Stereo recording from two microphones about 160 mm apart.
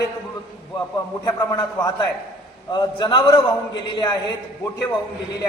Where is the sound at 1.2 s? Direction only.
25° left (ahead or behind).